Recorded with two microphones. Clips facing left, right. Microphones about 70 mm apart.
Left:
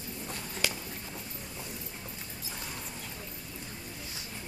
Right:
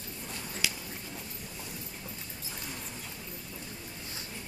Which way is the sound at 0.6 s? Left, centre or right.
Left.